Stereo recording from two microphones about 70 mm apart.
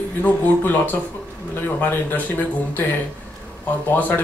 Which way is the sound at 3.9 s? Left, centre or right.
Left.